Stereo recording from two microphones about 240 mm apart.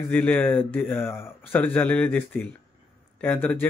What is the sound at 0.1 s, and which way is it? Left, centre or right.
Speech, centre.